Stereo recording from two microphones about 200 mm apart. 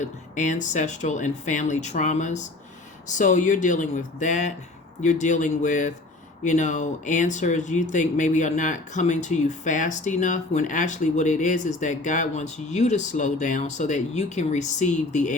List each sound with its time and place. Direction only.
0.0 s speech: 40° left (ahead or behind)